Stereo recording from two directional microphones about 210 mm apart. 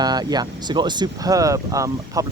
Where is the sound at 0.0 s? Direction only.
20° right (ahead or behind).